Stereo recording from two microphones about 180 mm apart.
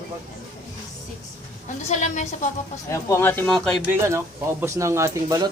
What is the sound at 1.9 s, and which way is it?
Speech, 40° left (ahead or behind).